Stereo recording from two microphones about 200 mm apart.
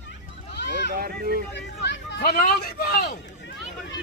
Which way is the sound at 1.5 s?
60° left (ahead or behind).